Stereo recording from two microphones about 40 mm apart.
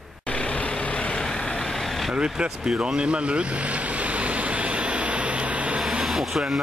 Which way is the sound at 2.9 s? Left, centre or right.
Right.